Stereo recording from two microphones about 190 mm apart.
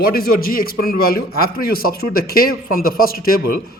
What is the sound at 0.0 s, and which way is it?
A man's voice, 50° left (ahead or behind).